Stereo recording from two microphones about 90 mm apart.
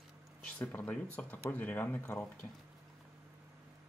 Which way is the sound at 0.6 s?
20° left (ahead or behind).